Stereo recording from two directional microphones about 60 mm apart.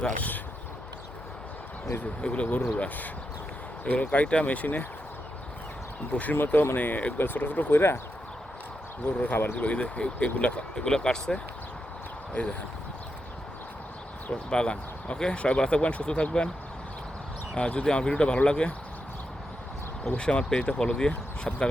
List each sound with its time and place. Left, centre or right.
2.2 s speech: left
6.3 s speech: left
7.7 s speech: left
9.0 s speech: left
9.6 s speech: left
10.8 s speech: centre
12.3 s speech: left
14.5 s speech: centre
17.5 s speech: centre
20.1 s speech: centre